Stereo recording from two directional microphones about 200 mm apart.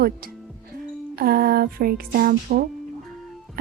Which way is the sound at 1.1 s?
50° right (ahead or behind).